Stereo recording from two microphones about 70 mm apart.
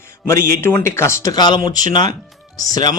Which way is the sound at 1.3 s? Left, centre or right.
Left.